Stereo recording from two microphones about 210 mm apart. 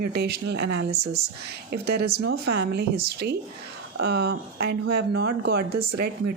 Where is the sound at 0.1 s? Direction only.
50° right (ahead or behind).